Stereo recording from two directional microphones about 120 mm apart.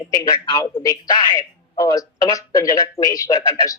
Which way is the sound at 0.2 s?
30° left (ahead or behind).